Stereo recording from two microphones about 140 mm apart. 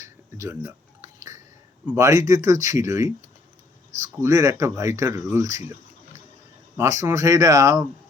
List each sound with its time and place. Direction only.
0.0 s a sound: 20° right (ahead or behind)
2.0 s speech: 25° right (ahead or behind)
6.7 s speech: 20° right (ahead or behind)